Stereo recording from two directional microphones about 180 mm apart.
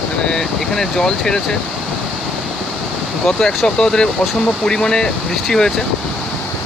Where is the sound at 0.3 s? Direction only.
5° left (ahead or behind).